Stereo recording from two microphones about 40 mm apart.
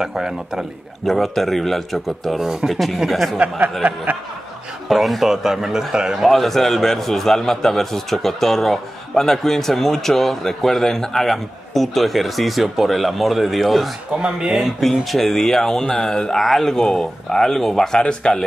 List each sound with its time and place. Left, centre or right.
0.0 s speech: centre
1.0 s a man's voice: centre
2.4 s speech: centre
2.7 s a man's voice: centre
3.8 s speech: right
4.8 s a man's voice: centre
14.1 s speech: right
14.5 s a man's voice: centre